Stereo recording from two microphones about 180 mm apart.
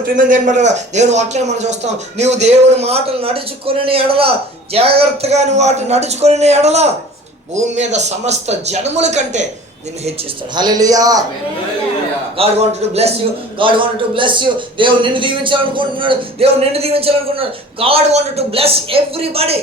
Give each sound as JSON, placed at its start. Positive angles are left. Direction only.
{"t": 0.2, "sound": "a man's voice", "side_deg": -45}
{"t": 10.5, "sound": "speech", "side_deg": -20}
{"t": 12.4, "sound": "a man's voice", "side_deg": -35}